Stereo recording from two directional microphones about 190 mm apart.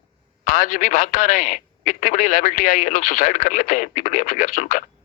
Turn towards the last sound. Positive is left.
turn(degrees=40)  # may be behind; listen again after turning